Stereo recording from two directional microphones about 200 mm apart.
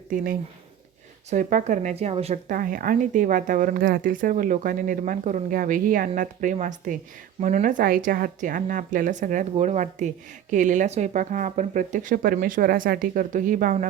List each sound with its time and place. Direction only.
1.3 s speech: 40° right (ahead or behind)
2.5 s a woman's voice: 45° right (ahead or behind)